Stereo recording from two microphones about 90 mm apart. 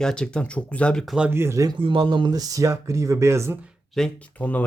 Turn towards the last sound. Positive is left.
turn(degrees=20)  # may be behind; listen again after turning